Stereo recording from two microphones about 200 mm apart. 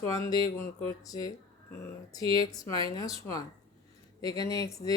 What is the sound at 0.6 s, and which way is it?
Speech, 15° left (ahead or behind).